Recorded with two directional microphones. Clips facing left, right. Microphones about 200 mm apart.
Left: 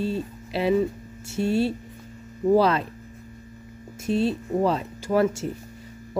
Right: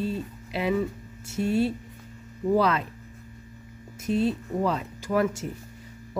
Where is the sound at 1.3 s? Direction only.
30° left (ahead or behind).